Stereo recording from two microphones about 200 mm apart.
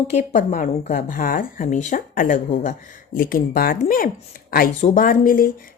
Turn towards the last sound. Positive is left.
turn(degrees=45)  # may be behind; listen again after turning